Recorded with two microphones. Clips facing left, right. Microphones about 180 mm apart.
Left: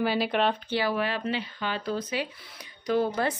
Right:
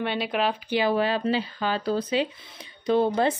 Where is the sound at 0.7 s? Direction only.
20° right (ahead or behind).